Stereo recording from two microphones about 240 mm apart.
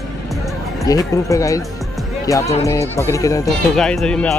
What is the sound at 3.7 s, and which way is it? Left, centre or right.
Speech, centre.